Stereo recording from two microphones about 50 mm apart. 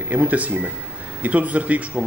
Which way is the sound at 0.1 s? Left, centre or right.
Right.